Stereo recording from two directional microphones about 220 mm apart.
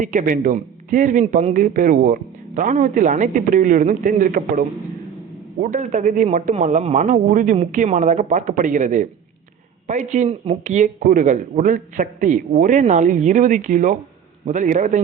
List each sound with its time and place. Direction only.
0.0 s a man's voice: 35° right (ahead or behind)